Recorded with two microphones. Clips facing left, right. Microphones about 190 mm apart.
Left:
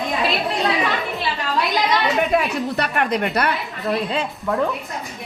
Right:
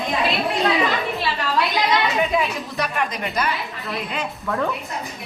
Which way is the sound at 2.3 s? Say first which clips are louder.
Left 3 dB; 60° left (ahead or behind).